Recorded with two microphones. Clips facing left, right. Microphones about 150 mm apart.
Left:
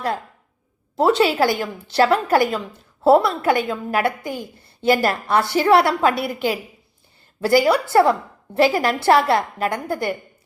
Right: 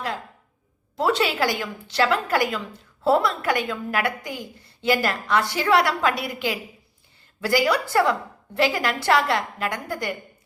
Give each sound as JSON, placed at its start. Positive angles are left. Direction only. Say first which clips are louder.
{"t": 1.0, "sound": "a woman's voice", "louder": "left 5 dB", "side_deg": 30}
{"t": 1.5, "sound": "a woman's voice", "louder": "left 4 dB", "side_deg": 40}